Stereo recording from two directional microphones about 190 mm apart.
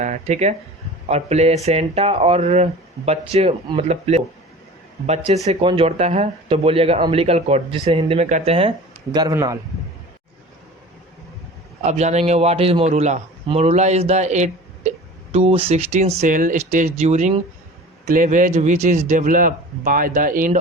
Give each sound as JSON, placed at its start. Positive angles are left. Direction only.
{"t": 0.0, "sound": "a man's voice", "side_deg": -35}
{"t": 9.1, "sound": "speech", "side_deg": -20}
{"t": 11.8, "sound": "a man's voice", "side_deg": -35}